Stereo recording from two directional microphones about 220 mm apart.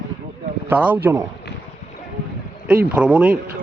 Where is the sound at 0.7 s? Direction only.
10° right (ahead or behind).